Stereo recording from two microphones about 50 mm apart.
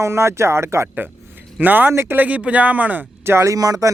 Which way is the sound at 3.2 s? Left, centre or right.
Right.